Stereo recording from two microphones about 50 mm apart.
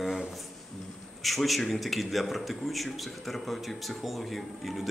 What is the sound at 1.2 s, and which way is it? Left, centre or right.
A man's voice, centre.